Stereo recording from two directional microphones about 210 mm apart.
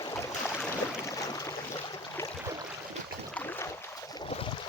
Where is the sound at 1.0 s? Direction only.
15° left (ahead or behind).